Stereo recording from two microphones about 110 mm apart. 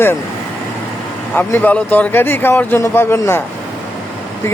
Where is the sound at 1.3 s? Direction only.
15° left (ahead or behind).